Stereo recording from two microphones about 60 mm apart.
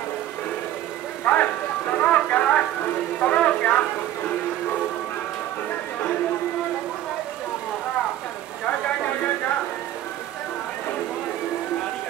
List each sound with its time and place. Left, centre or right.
1.2 s vehicle: left
3.2 s speech: left